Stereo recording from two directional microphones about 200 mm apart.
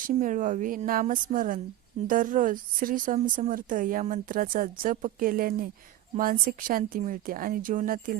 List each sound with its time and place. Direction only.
0.0 s a woman's voice: 40° right (ahead or behind)